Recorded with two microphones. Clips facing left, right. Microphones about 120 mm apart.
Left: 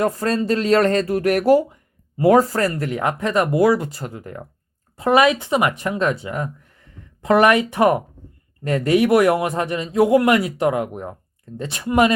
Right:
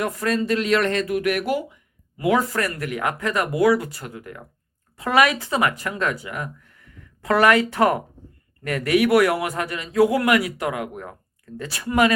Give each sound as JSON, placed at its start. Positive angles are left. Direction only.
{"t": 0.0, "sound": "a man's voice", "side_deg": 30}